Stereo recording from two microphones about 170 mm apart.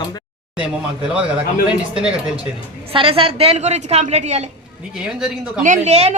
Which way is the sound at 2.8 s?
30° right (ahead or behind).